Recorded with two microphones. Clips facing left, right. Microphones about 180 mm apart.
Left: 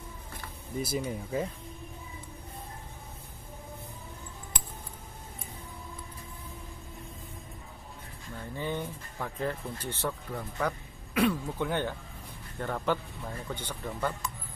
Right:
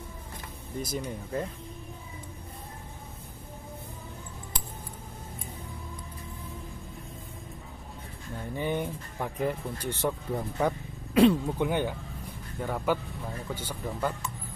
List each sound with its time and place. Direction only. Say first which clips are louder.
0.7 s speech: left 2 dB; 5° left (ahead or behind)
8.5 s speech: right 4 dB; 15° right (ahead or behind)
11.5 s speech: right 3 dB; 15° right (ahead or behind)